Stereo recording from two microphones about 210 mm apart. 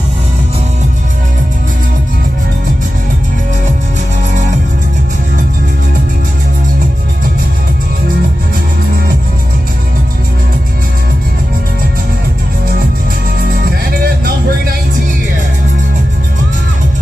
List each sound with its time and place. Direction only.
14.0 s music: 45° right (ahead or behind)